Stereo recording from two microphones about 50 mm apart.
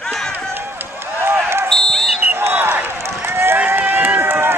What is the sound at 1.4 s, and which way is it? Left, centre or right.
Basketball bounce, right.